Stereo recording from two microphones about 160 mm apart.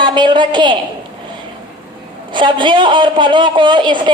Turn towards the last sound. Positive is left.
turn(degrees=-30)  # may be behind; listen again after turning